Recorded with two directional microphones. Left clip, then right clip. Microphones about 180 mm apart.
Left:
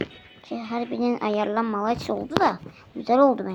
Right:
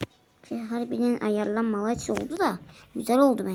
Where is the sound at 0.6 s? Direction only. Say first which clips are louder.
Left 2 dB; 25° right (ahead or behind).